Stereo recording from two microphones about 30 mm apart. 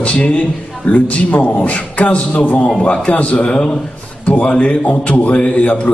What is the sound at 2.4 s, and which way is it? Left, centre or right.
Speech, left.